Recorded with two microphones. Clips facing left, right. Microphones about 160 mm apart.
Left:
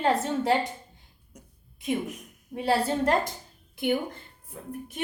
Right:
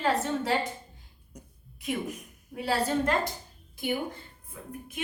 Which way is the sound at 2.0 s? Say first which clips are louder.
Right 1 dB; centre (ahead or behind).